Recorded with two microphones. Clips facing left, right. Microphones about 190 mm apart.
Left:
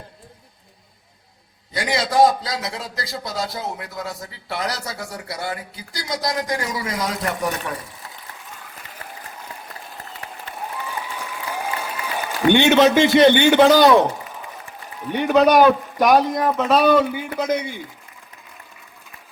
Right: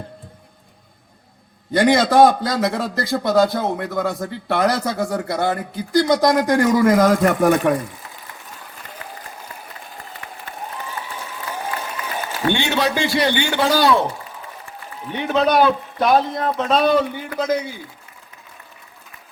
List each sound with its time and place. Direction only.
1.7 s a man's voice: 55° right (ahead or behind)
11.2 s applause: 15° left (ahead or behind)
12.5 s a man's voice: 20° left (ahead or behind)